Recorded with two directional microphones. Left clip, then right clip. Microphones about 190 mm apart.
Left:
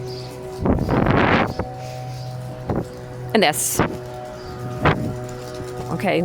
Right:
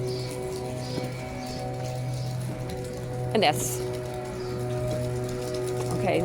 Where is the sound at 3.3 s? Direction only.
50° left (ahead or behind).